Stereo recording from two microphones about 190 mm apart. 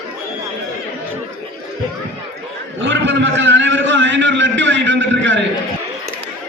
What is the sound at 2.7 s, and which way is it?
A man's voice, 70° right (ahead or behind).